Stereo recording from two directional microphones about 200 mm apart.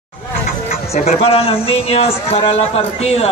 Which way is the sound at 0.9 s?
30° left (ahead or behind).